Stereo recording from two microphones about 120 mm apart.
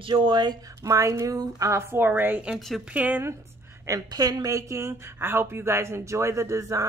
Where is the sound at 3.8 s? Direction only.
30° right (ahead or behind).